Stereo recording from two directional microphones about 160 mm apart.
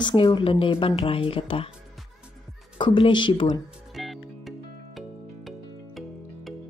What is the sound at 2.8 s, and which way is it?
Speech, 30° left (ahead or behind).